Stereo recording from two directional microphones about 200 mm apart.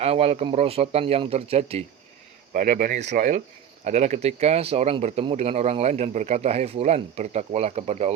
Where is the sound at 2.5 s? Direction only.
45° right (ahead or behind).